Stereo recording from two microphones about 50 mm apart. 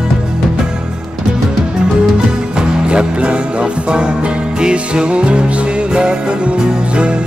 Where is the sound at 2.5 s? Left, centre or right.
Centre.